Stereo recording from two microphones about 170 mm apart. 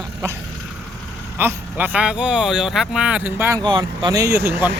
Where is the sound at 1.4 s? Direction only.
10° right (ahead or behind).